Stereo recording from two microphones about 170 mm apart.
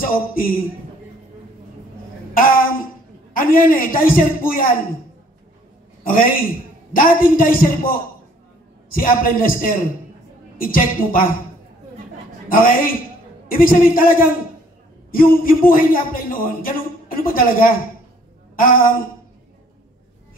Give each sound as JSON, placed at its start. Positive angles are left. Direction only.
{"t": 0.0, "sound": "a man's voice", "side_deg": 55}
{"t": 2.3, "sound": "a man's voice", "side_deg": 55}
{"t": 6.0, "sound": "a man's voice", "side_deg": 55}
{"t": 8.9, "sound": "a man's voice", "side_deg": 60}
{"t": 12.4, "sound": "a man's voice", "side_deg": 55}